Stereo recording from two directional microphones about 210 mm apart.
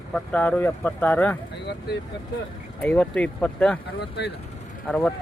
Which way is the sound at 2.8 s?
5° left (ahead or behind).